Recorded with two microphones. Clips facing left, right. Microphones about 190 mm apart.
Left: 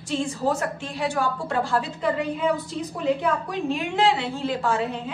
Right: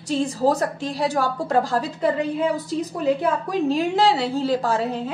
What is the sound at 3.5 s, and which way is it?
A woman's voice, 35° right (ahead or behind).